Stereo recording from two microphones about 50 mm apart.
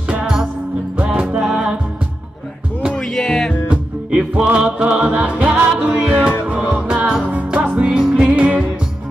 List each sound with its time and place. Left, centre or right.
0.1 s music: centre
3.0 s music: centre
3.6 s music: right
7.8 s music: centre
8.4 s music: right